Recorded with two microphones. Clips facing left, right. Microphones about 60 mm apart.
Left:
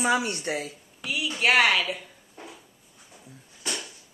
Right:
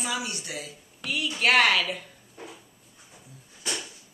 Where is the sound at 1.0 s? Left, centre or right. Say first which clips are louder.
Even; centre.